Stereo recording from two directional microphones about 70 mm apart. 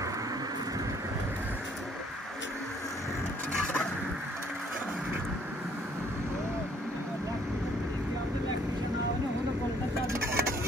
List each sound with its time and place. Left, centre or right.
10.0 s vehicle: right